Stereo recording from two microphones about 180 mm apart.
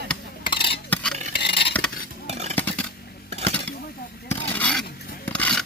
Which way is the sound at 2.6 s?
10° left (ahead or behind).